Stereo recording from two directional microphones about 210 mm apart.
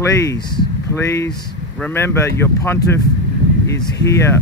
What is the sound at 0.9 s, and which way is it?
Speech, 15° left (ahead or behind).